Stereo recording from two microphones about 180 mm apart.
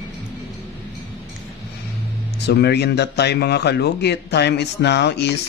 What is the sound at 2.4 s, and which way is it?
Speech, 65° left (ahead or behind).